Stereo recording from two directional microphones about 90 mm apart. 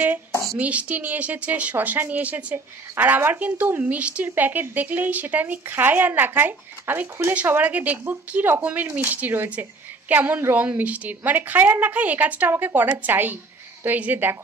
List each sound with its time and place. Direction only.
0.6 s speech: 15° right (ahead or behind)